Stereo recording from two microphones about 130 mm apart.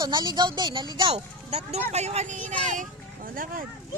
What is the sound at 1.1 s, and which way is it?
Speech, 55° right (ahead or behind).